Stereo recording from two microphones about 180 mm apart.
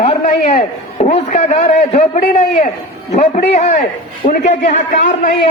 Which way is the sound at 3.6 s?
40° left (ahead or behind).